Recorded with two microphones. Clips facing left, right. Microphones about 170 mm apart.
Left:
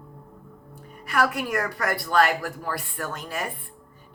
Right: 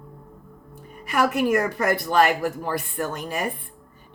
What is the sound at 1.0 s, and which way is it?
Speech, 20° right (ahead or behind).